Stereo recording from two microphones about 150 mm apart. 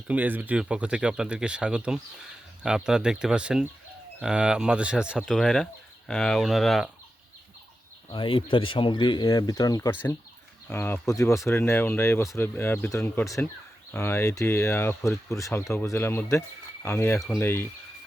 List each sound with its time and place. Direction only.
0.1 s speech: 10° right (ahead or behind)
8.1 s speech: 35° left (ahead or behind)
9.9 s speech: 15° left (ahead or behind)
17.2 s speech: centre (ahead or behind)
17.4 s speech: 15° left (ahead or behind)